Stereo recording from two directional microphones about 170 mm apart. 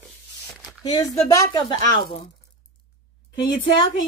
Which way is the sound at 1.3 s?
25° left (ahead or behind).